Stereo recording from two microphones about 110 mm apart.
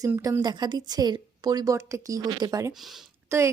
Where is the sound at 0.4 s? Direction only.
40° right (ahead or behind).